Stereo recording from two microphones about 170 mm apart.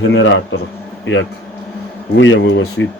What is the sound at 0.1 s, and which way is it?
Speech, 90° left.